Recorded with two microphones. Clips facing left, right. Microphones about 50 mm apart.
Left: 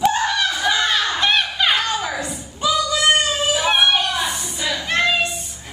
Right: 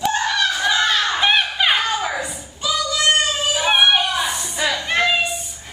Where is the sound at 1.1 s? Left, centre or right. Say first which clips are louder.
Right 1 dB; centre.